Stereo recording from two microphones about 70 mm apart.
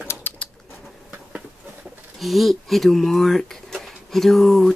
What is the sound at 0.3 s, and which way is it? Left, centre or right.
Bird, left.